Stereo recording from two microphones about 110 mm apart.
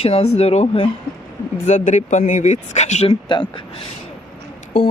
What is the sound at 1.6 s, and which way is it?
Speech, 90° left.